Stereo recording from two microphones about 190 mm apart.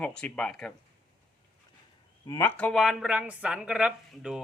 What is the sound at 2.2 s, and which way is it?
Speech, 20° left (ahead or behind).